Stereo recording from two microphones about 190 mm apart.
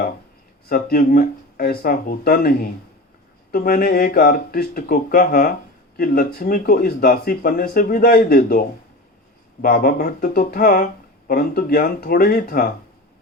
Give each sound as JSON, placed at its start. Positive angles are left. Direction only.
{"t": 0.7, "sound": "speech", "side_deg": 45}